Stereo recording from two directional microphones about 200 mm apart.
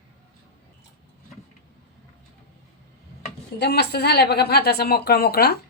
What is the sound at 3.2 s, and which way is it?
A woman's voice, 55° left (ahead or behind).